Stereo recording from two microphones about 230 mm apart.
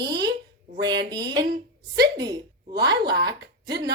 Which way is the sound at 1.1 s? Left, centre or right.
Centre.